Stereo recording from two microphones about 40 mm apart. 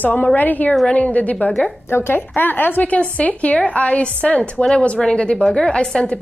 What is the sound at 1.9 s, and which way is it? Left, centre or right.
Speech, left.